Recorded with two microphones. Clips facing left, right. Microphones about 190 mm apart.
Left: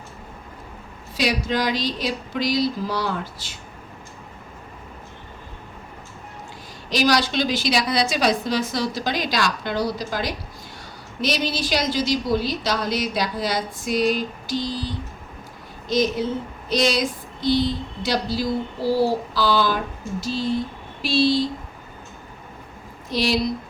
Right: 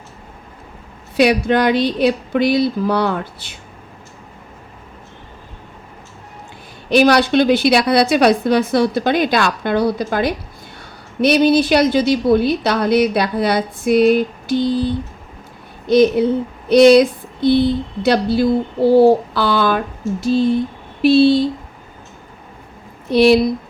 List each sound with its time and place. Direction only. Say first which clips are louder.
1.1 s speech: right 9 dB; 60° right (ahead or behind)
6.9 s speech: right 8 dB; 60° right (ahead or behind)
23.0 s speech: right 11 dB; 60° right (ahead or behind)